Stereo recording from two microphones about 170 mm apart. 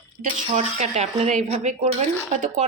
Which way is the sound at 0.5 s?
40° right (ahead or behind).